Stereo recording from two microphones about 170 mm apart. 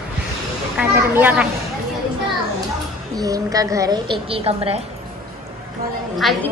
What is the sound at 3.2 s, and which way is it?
A woman's voice, 20° right (ahead or behind).